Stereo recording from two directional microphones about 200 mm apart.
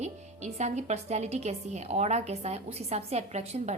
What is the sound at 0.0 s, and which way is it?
A woman's voice, 35° right (ahead or behind).